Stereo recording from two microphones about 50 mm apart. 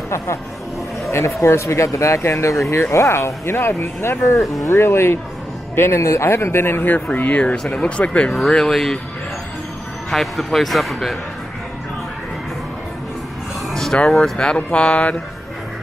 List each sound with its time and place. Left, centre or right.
1.1 s speech: left
4.6 s speech: left
6.8 s speech: left
8.3 s speech: centre
10.1 s speech: centre
13.9 s speech: centre